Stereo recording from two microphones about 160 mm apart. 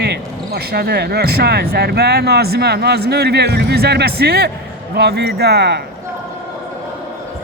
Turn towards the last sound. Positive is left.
turn(degrees=-90)